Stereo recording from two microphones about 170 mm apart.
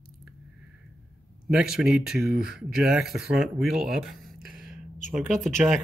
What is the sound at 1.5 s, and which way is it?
Speech, 5° right (ahead or behind).